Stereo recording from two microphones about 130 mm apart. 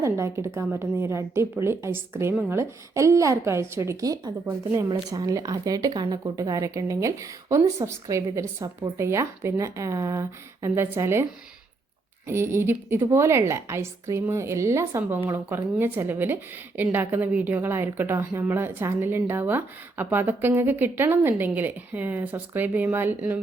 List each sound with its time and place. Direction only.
0.0 s a woman's voice: 20° right (ahead or behind)
12.3 s a woman's voice: 20° right (ahead or behind)